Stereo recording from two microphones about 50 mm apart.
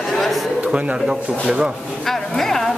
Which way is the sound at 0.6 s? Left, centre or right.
Right.